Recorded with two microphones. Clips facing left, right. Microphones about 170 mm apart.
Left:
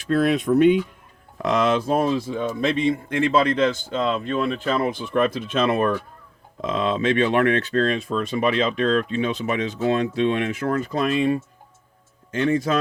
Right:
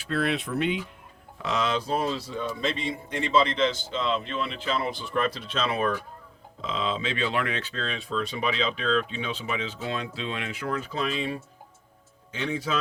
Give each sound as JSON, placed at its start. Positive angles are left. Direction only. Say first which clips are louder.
{"t": 0.1, "sound": "speech", "louder": "left 9 dB", "side_deg": 45}